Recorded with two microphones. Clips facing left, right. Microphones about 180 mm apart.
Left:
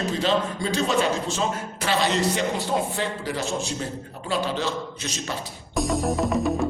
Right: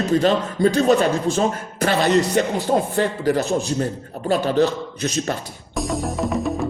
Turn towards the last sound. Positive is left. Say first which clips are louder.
# even
turn(degrees=0)  # may be behind; listen again after turning